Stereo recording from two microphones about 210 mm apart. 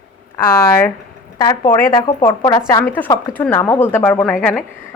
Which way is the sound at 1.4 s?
15° left (ahead or behind).